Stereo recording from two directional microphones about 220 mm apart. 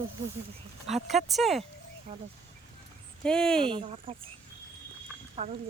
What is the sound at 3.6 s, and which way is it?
Speech, 25° right (ahead or behind).